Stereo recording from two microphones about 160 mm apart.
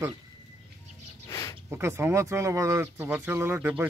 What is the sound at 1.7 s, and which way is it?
Speech, 15° right (ahead or behind).